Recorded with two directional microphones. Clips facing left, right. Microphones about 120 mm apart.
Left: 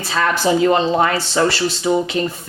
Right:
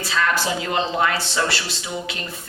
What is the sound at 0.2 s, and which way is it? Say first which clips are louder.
A woman's voice: left 7 dB; 40° left (ahead or behind).